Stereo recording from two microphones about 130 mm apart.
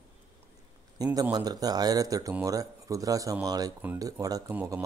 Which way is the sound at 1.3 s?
30° right (ahead or behind).